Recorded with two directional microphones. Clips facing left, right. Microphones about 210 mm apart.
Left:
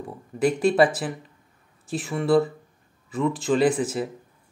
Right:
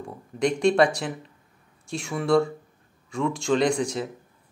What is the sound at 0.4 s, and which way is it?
Speech, 5° left (ahead or behind).